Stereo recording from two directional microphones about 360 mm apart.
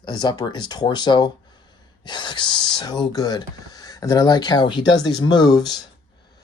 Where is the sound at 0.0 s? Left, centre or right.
Centre.